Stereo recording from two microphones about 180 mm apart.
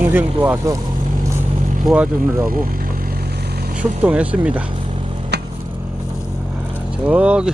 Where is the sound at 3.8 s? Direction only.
10° right (ahead or behind).